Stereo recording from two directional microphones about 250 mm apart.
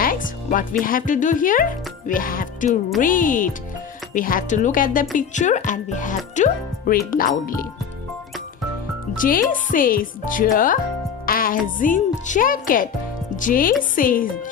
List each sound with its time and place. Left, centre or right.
0.0 s speech: left
2.0 s music: left
3.0 s speech: left
9.1 s speech: left